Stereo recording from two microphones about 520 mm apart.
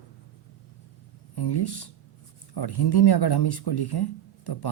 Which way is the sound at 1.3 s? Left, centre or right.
Left.